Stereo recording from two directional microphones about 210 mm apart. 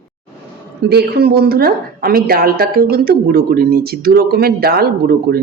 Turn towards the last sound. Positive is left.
turn(degrees=-45)  # may be behind; listen again after turning